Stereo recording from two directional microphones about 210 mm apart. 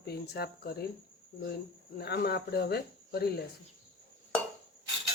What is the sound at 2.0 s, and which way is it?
Speech, 50° left (ahead or behind).